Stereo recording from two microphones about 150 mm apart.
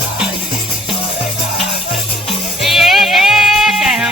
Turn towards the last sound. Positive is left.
turn(degrees=-5)  # may be behind; listen again after turning